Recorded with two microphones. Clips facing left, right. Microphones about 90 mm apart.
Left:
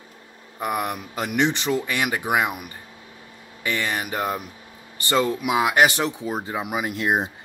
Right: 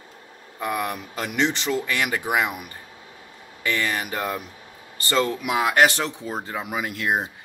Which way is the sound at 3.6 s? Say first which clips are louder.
Right 1 dB; 15° left (ahead or behind).